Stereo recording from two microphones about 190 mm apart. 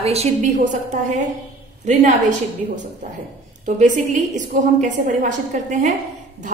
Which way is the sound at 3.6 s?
40° right (ahead or behind).